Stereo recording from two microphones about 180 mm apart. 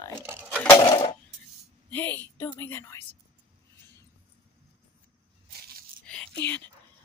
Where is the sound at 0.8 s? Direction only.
25° left (ahead or behind).